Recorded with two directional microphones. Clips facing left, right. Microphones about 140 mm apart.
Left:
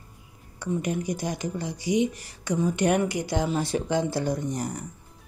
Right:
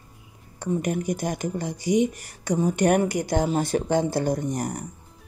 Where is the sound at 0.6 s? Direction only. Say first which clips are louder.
Right 2 dB; 50° right (ahead or behind).